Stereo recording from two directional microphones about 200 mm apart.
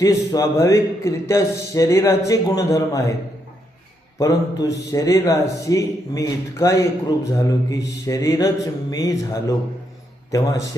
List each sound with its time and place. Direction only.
0.0 s speech: 15° left (ahead or behind)
4.2 s speech: 20° left (ahead or behind)